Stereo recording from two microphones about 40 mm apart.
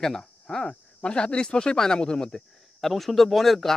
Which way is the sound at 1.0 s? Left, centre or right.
Left.